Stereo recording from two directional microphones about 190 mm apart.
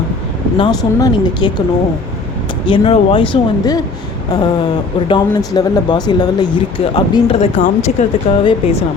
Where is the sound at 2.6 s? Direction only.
25° left (ahead or behind).